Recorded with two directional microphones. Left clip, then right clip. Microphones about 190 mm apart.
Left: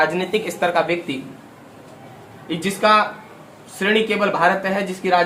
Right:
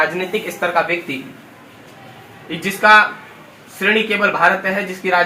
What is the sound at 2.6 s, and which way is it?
Speech, 35° left (ahead or behind).